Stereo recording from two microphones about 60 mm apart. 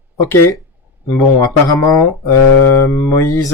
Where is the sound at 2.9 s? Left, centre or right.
Left.